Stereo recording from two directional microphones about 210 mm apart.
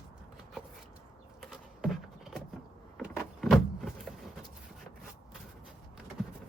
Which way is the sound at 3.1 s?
Centre (ahead or behind).